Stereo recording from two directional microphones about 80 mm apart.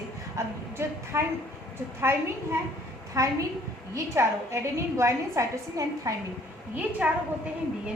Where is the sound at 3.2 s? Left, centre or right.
Right.